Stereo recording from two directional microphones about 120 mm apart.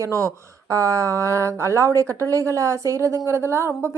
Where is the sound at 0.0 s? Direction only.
25° right (ahead or behind).